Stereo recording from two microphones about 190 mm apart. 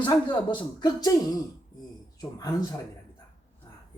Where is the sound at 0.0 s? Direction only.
25° left (ahead or behind).